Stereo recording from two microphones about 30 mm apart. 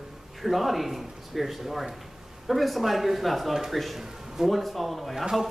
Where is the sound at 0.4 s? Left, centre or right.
Centre.